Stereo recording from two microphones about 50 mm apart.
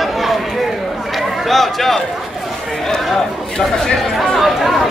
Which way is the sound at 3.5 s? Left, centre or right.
Centre.